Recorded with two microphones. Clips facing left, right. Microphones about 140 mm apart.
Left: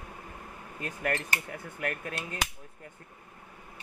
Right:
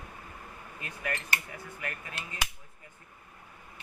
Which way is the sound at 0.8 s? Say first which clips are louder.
Left 5 dB; 55° left (ahead or behind).